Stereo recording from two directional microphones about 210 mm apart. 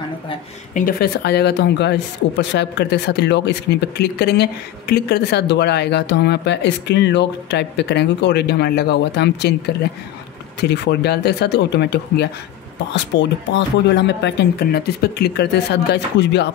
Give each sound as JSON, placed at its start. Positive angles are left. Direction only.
{"t": 0.7, "sound": "speech", "side_deg": 45}
{"t": 10.6, "sound": "speech", "side_deg": 50}